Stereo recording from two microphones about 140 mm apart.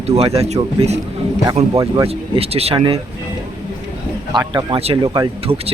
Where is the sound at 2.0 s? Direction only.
45° right (ahead or behind).